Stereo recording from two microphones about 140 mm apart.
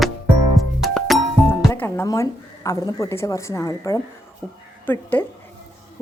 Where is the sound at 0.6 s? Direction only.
Centre (ahead or behind).